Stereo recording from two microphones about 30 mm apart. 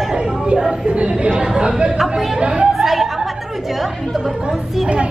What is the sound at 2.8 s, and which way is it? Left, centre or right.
Chuckle, centre.